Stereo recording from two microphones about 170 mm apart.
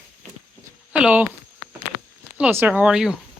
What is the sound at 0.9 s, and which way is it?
Speech, 10° right (ahead or behind).